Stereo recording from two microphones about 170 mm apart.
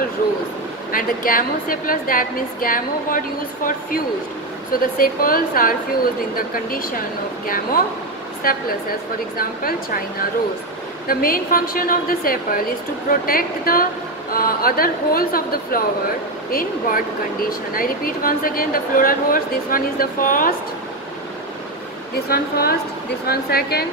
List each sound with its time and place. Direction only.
0.9 s a woman's voice: 55° left (ahead or behind)
11.1 s a woman's voice: 60° left (ahead or behind)
22.3 s a woman's voice: 65° left (ahead or behind)